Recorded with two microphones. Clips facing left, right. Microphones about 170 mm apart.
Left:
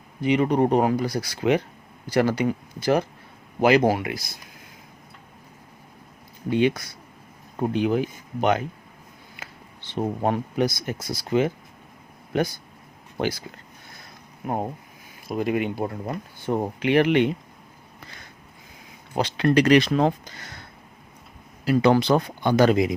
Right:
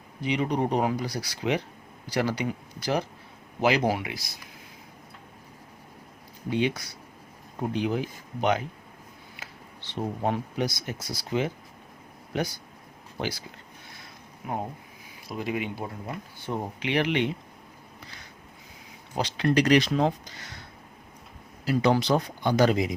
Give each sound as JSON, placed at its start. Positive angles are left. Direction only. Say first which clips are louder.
{"t": 0.2, "sound": "speech", "louder": "left 6 dB", "side_deg": 55}
{"t": 6.5, "sound": "speech", "louder": "left 5 dB", "side_deg": 55}
{"t": 13.1, "sound": "speech", "louder": "left 6 dB", "side_deg": 50}
{"t": 14.4, "sound": "speech", "louder": "left 5 dB", "side_deg": 45}
{"t": 19.1, "sound": "speech", "louder": "left 4 dB", "side_deg": 55}
{"t": 21.6, "sound": "speech", "louder": "left 5 dB", "side_deg": 60}